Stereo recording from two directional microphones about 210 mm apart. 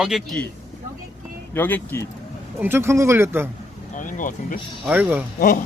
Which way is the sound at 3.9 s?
40° left (ahead or behind).